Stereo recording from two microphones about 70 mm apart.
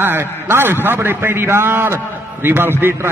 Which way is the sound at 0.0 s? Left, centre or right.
Right.